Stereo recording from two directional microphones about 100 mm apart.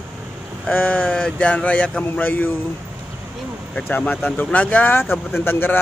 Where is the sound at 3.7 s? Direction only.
15° left (ahead or behind).